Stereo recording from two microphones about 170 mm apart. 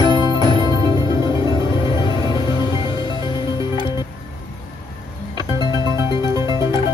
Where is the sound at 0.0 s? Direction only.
25° right (ahead or behind).